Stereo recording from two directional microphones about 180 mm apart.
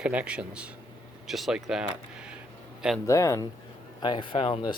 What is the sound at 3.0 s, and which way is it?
Speech, 15° left (ahead or behind).